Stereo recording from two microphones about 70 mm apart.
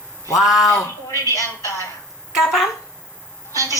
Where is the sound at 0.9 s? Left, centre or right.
Left.